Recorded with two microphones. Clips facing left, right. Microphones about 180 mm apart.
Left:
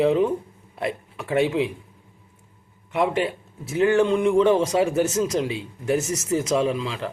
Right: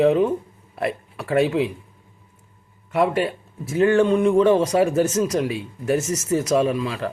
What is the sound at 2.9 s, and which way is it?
Speech, 20° left (ahead or behind).